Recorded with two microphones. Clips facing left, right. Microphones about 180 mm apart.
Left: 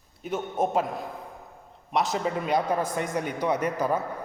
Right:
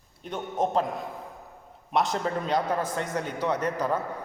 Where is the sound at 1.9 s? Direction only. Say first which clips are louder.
Even; centre (ahead or behind).